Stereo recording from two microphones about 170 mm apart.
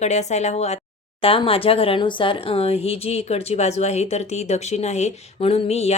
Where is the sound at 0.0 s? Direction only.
40° left (ahead or behind).